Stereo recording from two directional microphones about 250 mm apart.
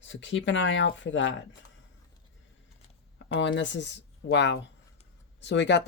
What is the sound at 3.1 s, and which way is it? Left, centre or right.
Speech, left.